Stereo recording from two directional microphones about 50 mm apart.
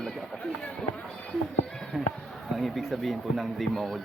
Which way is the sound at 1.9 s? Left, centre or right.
Centre.